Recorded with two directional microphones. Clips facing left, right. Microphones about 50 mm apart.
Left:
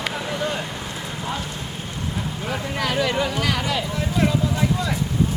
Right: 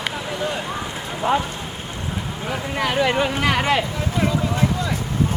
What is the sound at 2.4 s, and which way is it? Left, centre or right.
Speech, centre.